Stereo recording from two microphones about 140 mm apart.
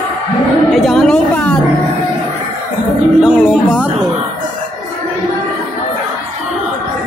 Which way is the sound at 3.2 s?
5° right (ahead or behind).